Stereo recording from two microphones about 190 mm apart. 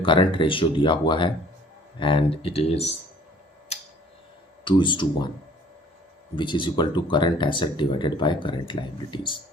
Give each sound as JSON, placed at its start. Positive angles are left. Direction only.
{"t": 0.0, "sound": "speech", "side_deg": 25}
{"t": 4.6, "sound": "speech", "side_deg": 25}
{"t": 6.3, "sound": "speech", "side_deg": 25}